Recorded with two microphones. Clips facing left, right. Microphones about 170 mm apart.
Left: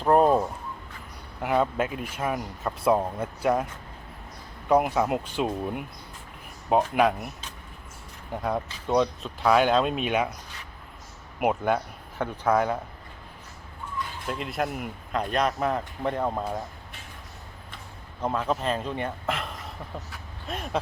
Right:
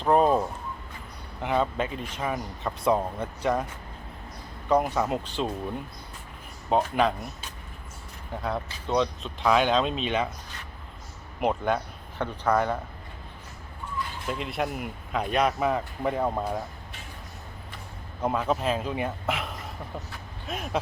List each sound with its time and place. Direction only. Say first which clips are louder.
0.0 s a sound: left 1 dB; 5° left (ahead or behind)
1.4 s speech: left 2 dB; 5° left (ahead or behind)
4.7 s speech: left 2 dB; 10° left (ahead or behind)
8.3 s speech: left 2 dB; 10° left (ahead or behind)
11.3 s speech: left 1 dB; 10° left (ahead or behind)
14.3 s speech: left 1 dB; centre (ahead or behind)
18.2 s speech: right 1 dB; 5° right (ahead or behind)